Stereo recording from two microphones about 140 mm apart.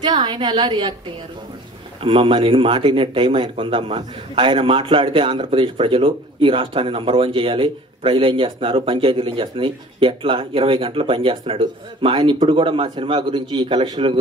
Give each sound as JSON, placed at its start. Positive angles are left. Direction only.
{"t": 0.0, "sound": "a woman's voice", "side_deg": -30}
{"t": 2.0, "sound": "speech", "side_deg": -35}